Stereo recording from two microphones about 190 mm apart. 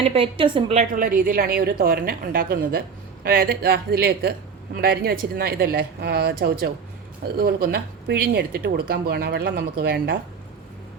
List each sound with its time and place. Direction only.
0.0 s a woman's voice: 30° right (ahead or behind)
0.9 s speech: 50° right (ahead or behind)